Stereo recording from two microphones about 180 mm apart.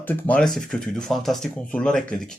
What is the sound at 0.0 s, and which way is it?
Speech, 10° left (ahead or behind).